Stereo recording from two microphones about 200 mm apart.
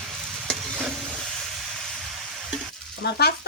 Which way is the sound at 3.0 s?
55° left (ahead or behind).